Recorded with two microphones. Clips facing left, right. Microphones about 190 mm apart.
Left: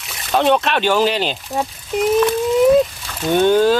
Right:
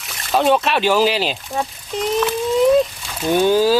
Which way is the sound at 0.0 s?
Centre (ahead or behind).